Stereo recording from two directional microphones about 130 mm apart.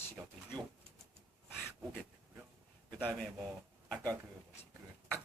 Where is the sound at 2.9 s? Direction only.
10° left (ahead or behind).